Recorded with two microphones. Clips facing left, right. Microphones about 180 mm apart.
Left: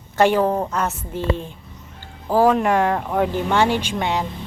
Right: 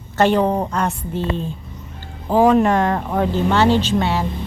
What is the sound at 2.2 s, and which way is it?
Speech, 15° right (ahead or behind).